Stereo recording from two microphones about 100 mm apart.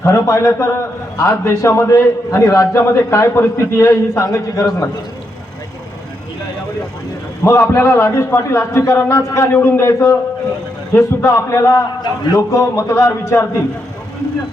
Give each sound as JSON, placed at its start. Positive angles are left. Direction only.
{"t": 0.0, "sound": "a man's voice", "side_deg": 30}
{"t": 7.4, "sound": "a man's voice", "side_deg": 30}